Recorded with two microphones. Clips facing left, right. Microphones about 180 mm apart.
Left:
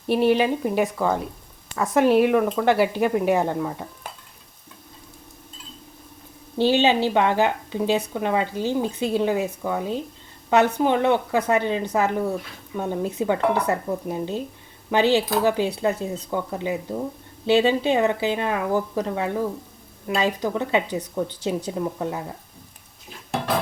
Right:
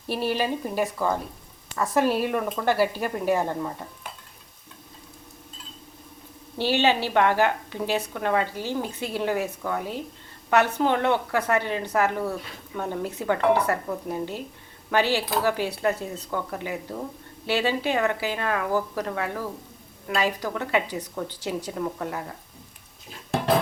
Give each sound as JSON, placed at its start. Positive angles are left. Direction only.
{"t": 0.1, "sound": "a woman's voice", "side_deg": 20}
{"t": 6.6, "sound": "a woman's voice", "side_deg": 20}